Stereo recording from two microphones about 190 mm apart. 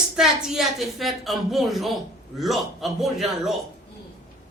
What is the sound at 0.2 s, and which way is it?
A woman's voice, centre (ahead or behind).